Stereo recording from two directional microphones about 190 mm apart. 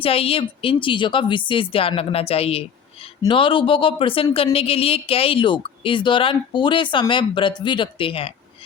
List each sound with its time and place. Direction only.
0.0 s speech: 30° left (ahead or behind)